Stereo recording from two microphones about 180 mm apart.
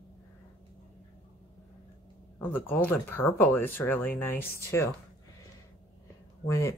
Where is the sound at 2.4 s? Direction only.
10° left (ahead or behind).